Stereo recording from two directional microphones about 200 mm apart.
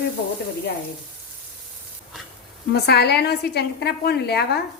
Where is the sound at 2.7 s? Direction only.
55° left (ahead or behind).